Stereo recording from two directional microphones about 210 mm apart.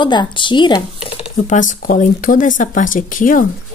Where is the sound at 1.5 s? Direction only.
40° left (ahead or behind).